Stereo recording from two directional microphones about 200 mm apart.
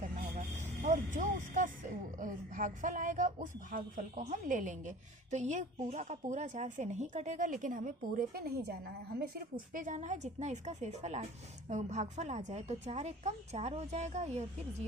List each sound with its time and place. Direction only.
0.3 s speech: 40° right (ahead or behind)
9.7 s a woman's voice: 40° right (ahead or behind)